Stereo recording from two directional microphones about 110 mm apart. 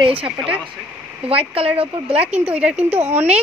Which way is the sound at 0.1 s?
55° right (ahead or behind).